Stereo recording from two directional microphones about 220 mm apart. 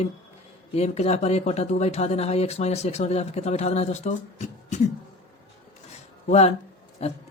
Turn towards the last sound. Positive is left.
turn(degrees=30)  # may be behind; listen again after turning